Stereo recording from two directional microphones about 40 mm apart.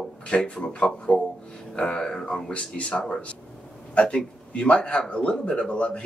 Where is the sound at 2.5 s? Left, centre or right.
Left.